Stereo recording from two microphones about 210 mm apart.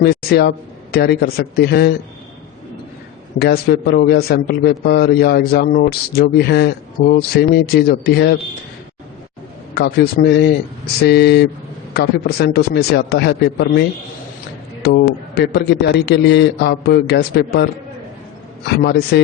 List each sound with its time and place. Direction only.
0.0 s a man's voice: 50° left (ahead or behind)
3.3 s a man's voice: 50° left (ahead or behind)
9.7 s a man's voice: 45° left (ahead or behind)
18.8 s a man's voice: 50° left (ahead or behind)